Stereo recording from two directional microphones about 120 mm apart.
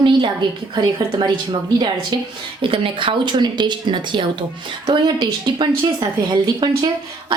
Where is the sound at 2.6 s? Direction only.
45° right (ahead or behind).